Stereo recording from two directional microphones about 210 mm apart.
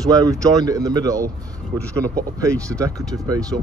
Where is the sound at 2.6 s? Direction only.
15° right (ahead or behind).